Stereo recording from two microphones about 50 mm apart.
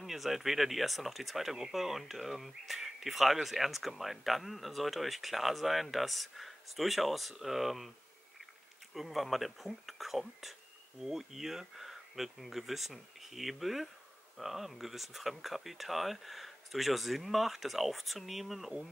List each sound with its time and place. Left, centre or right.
0.0 s speech: centre
8.9 s speech: centre